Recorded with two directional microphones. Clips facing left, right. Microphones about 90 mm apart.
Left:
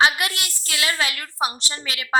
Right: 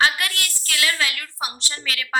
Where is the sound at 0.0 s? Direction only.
20° left (ahead or behind).